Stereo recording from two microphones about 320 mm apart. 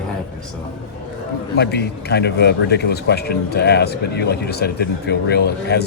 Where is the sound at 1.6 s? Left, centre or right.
Left.